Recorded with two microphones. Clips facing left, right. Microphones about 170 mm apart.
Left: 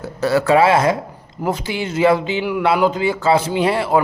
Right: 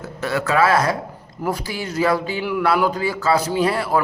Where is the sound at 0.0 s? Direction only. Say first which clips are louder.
Left 6 dB; 35° left (ahead or behind).